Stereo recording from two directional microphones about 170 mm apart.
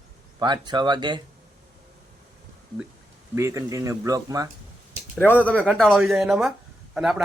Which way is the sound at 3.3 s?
15° right (ahead or behind).